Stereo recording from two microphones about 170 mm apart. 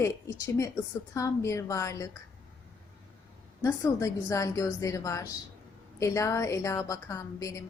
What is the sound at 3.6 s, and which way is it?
A woman's voice, 20° left (ahead or behind).